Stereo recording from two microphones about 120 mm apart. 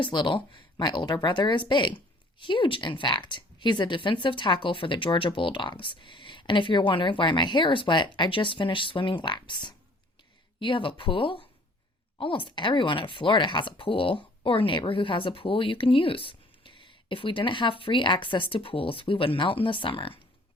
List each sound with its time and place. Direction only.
0.0 s speech: 40° left (ahead or behind)